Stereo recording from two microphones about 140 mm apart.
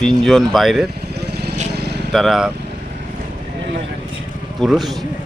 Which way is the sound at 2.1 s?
Centre (ahead or behind).